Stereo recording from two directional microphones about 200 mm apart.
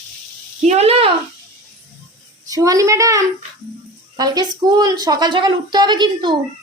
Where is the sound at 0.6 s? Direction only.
35° right (ahead or behind).